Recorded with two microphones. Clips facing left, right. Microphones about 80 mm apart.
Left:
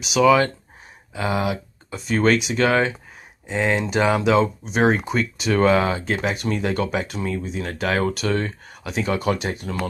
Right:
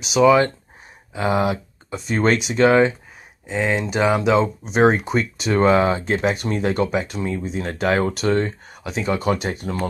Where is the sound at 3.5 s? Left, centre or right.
Centre.